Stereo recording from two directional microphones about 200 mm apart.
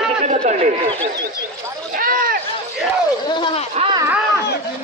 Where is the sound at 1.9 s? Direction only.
45° right (ahead or behind).